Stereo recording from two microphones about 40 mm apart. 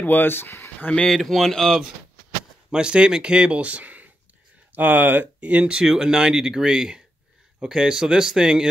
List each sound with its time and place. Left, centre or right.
0.0 s speech: left
1.0 s speech: centre
2.7 s speech: right
3.5 s speech: right
4.7 s speech: right
5.4 s speech: right
5.9 s speech: centre